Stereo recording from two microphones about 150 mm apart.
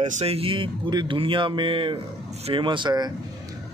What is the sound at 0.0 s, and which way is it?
A man's voice, 45° right (ahead or behind).